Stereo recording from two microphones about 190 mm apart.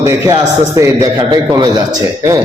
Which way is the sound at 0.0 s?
15° right (ahead or behind).